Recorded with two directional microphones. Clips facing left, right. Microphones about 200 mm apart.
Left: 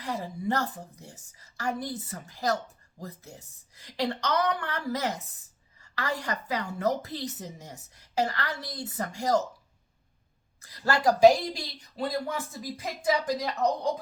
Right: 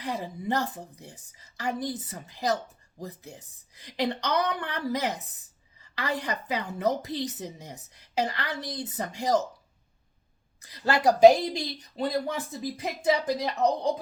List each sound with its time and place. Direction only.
0.0 s a woman's voice: 15° right (ahead or behind)
10.6 s a woman's voice: 20° right (ahead or behind)